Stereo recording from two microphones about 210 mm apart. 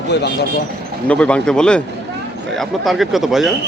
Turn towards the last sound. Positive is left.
turn(degrees=0)  # may be behind; listen again after turning